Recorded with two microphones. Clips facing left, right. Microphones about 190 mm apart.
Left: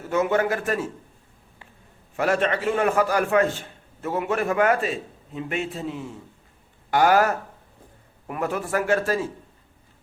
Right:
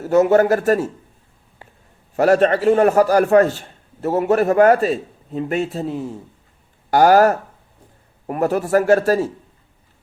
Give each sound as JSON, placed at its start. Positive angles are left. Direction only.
{"t": 0.0, "sound": "a man's voice", "side_deg": -40}
{"t": 2.1, "sound": "a man's voice", "side_deg": -40}